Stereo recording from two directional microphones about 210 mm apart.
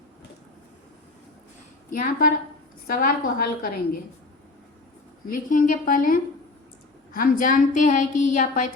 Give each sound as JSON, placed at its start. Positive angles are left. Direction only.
{"t": 2.0, "sound": "a woman's voice", "side_deg": 45}
{"t": 5.2, "sound": "a woman's voice", "side_deg": 40}